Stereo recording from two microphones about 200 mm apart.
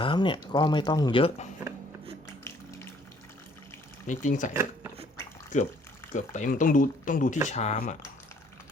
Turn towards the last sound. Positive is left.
turn(degrees=35)  # may be behind; listen again after turning